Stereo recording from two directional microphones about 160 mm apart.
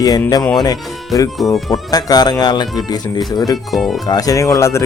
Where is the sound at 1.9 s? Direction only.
25° left (ahead or behind).